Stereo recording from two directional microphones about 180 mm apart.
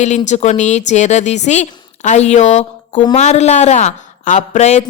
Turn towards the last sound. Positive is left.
turn(degrees=40)  # may be behind; listen again after turning